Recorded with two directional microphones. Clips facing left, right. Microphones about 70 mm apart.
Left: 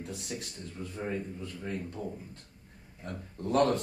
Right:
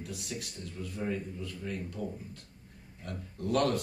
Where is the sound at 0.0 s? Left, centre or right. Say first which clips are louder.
Left 1 dB; left.